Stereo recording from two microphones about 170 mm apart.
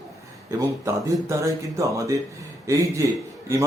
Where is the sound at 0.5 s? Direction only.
20° right (ahead or behind).